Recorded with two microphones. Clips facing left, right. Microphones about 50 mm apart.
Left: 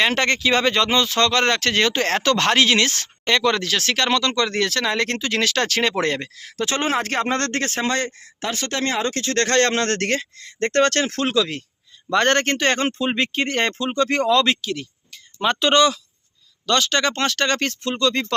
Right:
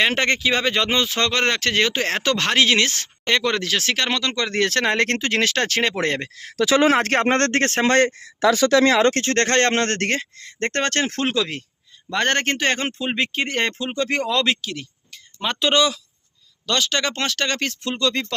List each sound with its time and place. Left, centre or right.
0.1 s speech: centre
4.6 s speech: right
5.4 s speech: right
6.6 s speech: right
8.9 s speech: right
9.1 s speech: right
12.1 s speech: centre
17.9 s speech: centre